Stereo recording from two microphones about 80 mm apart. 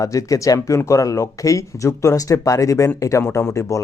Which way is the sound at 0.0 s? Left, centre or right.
Left.